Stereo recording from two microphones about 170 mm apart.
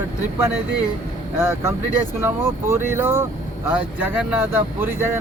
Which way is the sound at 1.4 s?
15° right (ahead or behind).